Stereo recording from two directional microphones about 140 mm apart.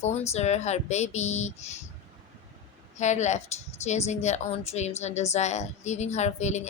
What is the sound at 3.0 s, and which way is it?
A woman's voice, 55° left (ahead or behind).